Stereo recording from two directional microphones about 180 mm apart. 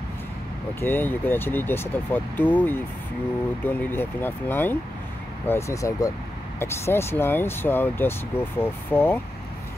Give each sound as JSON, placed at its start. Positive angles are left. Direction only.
{"t": 0.7, "sound": "speech", "side_deg": 10}